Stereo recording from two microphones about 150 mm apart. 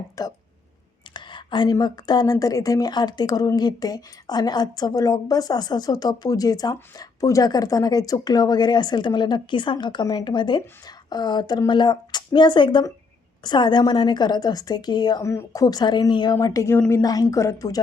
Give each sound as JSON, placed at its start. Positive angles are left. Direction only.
{"t": 0.2, "sound": "speech", "side_deg": 25}